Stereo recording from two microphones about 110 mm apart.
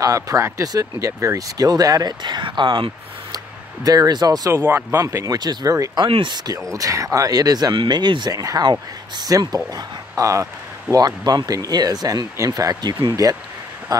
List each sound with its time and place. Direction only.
0.0 s speech: 30° right (ahead or behind); by 3.3 s 45° right (ahead or behind)
3.8 s speech: 35° right (ahead or behind)
4.6 s speech: 20° right (ahead or behind)
6.0 s speech: 55° right (ahead or behind)
6.3 s speech: 35° right (ahead or behind)